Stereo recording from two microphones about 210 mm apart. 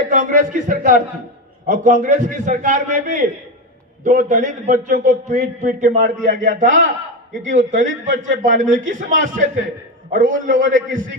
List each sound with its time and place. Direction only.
0.1 s a man's voice: 35° right (ahead or behind)